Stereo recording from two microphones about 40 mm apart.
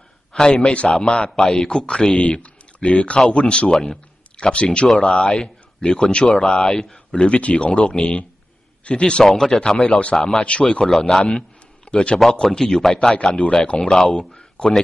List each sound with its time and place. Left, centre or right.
0.3 s a sound: left
0.6 s a man's voice: left
2.2 s a man's voice: left; by 7.0 s centre
7.1 s a man's voice: left
9.2 s a man's voice: centre
10.9 s a man's voice: centre
11.2 s a sound: left
12.4 s a man's voice: centre
12.9 s a man's voice: left